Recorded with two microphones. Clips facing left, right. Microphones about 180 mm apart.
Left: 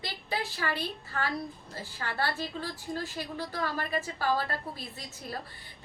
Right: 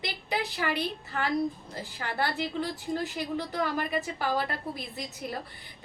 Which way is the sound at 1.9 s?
15° right (ahead or behind).